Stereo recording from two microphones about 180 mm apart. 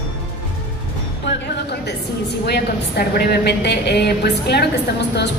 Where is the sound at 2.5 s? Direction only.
65° left (ahead or behind).